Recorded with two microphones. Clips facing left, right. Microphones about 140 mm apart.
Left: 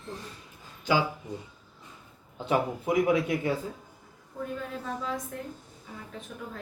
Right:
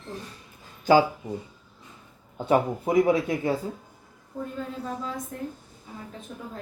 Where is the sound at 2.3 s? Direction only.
45° right (ahead or behind).